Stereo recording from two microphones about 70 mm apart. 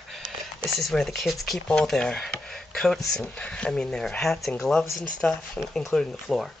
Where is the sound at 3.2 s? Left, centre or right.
Centre.